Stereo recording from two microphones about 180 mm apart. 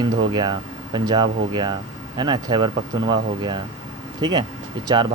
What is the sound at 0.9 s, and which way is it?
Speech, 25° right (ahead or behind).